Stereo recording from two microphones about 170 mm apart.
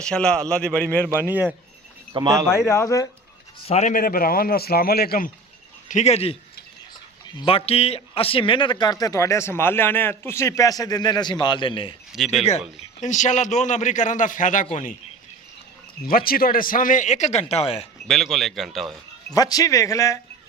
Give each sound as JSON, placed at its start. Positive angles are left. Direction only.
{"t": 0.0, "sound": "a man's voice", "side_deg": 5}
{"t": 1.2, "sound": "speech", "side_deg": -10}
{"t": 2.1, "sound": "speech", "side_deg": -25}
{"t": 2.6, "sound": "speech", "side_deg": 15}
{"t": 3.7, "sound": "speech", "side_deg": 45}
{"t": 5.9, "sound": "speech", "side_deg": 40}
{"t": 7.4, "sound": "a man's voice", "side_deg": 35}
{"t": 12.1, "sound": "a man's voice", "side_deg": 0}
{"t": 12.5, "sound": "a man's voice", "side_deg": 40}
{"t": 16.0, "sound": "a man's voice", "side_deg": 60}
{"t": 18.1, "sound": "a man's voice", "side_deg": 0}
{"t": 19.3, "sound": "a man's voice", "side_deg": 20}